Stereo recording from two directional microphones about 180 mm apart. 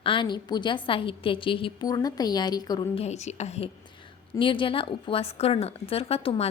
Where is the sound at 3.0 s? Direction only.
40° left (ahead or behind).